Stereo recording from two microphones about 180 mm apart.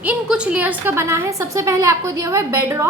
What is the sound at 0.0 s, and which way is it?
A woman's voice, 5° right (ahead or behind).